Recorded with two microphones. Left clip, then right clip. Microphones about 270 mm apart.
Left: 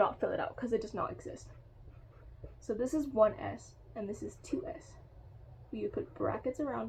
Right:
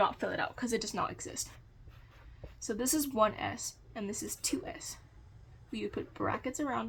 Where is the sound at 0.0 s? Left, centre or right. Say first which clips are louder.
Even; right.